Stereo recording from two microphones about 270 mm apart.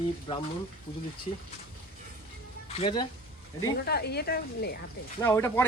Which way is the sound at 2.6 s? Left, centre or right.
Left.